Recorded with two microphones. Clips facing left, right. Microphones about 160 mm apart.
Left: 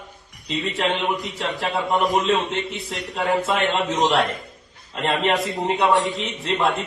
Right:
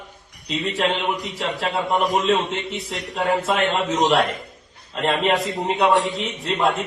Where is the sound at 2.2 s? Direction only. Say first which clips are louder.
Right 1 dB; 40° right (ahead or behind).